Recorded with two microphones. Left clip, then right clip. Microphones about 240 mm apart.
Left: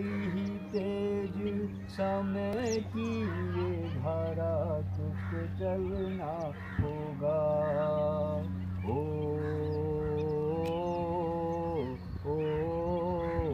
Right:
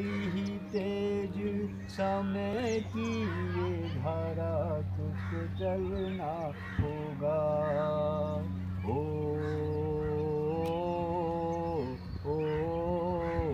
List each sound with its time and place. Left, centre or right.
0.0 s music: centre
2.2 s music: centre
3.1 s a sound: centre
5.6 s speech: centre
7.2 s mantra: right
11.0 s music: centre
12.3 s wild animals: centre
12.9 s wild animals: right
13.2 s a sound: centre